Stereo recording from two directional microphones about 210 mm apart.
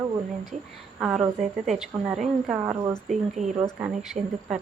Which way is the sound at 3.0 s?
35° right (ahead or behind).